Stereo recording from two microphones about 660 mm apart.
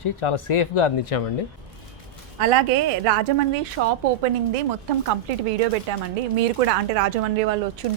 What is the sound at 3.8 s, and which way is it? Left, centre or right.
Speech, right.